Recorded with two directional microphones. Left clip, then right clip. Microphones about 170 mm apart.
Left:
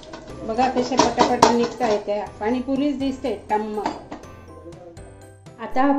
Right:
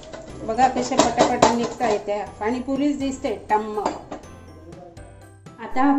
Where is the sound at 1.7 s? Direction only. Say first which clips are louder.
Left 1 dB; 10° right (ahead or behind).